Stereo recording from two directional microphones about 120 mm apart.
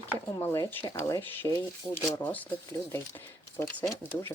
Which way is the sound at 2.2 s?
15° left (ahead or behind).